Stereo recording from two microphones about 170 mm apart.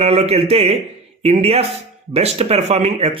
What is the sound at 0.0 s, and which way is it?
Speech, 40° right (ahead or behind).